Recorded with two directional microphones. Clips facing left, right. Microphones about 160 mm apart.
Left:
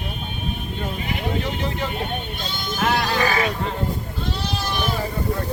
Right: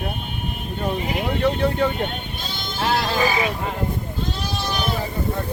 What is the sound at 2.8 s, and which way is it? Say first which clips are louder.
Speech: even; 30° right (ahead or behind).